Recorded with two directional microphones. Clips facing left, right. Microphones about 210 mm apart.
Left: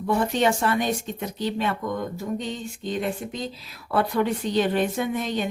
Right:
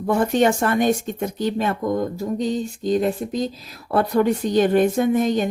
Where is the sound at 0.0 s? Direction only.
45° right (ahead or behind).